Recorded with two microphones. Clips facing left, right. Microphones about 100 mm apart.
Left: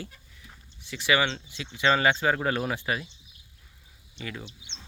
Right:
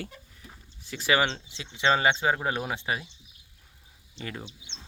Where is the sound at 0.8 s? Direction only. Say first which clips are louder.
Even; 40° right (ahead or behind).